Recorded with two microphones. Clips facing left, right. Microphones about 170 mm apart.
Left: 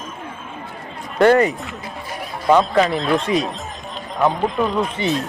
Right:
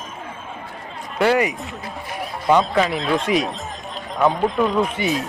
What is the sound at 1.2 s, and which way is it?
Speech, 10° right (ahead or behind).